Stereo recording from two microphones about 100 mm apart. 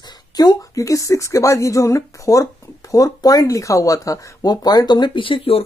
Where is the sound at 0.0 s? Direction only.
40° left (ahead or behind).